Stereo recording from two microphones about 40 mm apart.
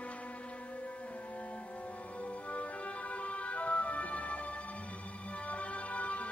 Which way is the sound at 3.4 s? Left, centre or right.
Left.